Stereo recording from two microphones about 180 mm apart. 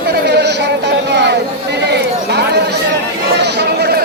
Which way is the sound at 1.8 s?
70° right (ahead or behind).